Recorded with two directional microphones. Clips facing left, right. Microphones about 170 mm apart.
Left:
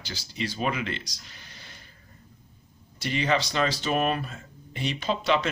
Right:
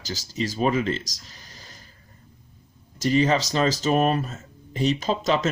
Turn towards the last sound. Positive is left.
turn(degrees=-40)  # may be behind; listen again after turning